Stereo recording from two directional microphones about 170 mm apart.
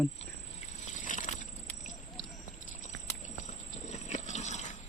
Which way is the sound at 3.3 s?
45° left (ahead or behind).